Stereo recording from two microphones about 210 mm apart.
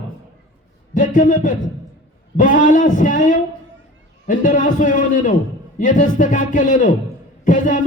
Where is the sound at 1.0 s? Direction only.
40° left (ahead or behind).